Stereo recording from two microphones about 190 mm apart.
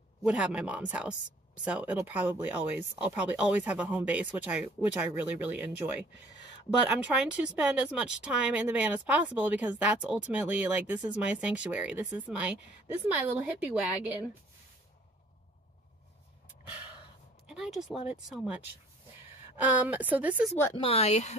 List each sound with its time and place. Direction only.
0.2 s speech: 5° right (ahead or behind)
17.5 s speech: centre (ahead or behind)
20.7 s a woman's voice: 30° left (ahead or behind)